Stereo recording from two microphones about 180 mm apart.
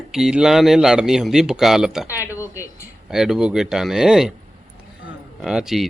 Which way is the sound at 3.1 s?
Centre (ahead or behind).